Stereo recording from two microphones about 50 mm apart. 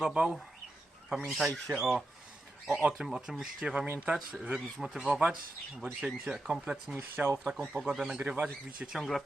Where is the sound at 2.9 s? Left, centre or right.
Centre; by 4.6 s right.